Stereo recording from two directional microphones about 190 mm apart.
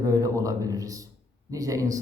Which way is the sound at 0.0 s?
15° right (ahead or behind).